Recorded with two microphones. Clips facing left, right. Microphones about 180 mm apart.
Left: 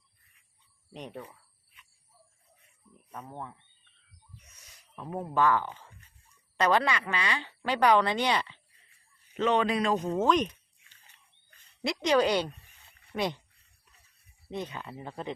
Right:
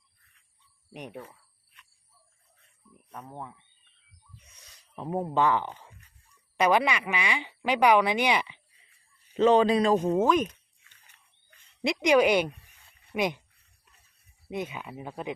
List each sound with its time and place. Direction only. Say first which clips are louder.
0.9 s speech: right 1 dB; 15° right (ahead or behind)
3.2 s speech: even; 5° right (ahead or behind)
4.9 s speech: right 2 dB; 25° right (ahead or behind)
9.3 s speech: right 6 dB; 30° right (ahead or behind)
10.1 s speech: right 2 dB; 10° right (ahead or behind)
11.8 s speech: right 3 dB; 15° right (ahead or behind)
14.5 s speech: right 2 dB; 10° right (ahead or behind)